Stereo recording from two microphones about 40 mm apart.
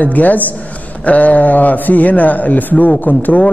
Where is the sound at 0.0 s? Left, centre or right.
Left.